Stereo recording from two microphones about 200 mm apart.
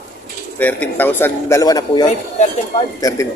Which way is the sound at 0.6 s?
10° left (ahead or behind).